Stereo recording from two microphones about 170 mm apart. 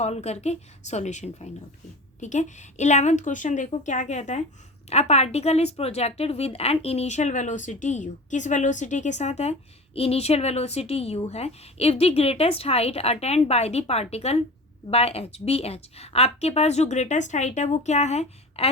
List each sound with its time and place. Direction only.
0.0 s a woman's voice: 40° left (ahead or behind)